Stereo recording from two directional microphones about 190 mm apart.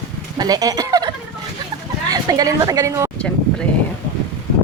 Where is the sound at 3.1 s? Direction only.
5° left (ahead or behind).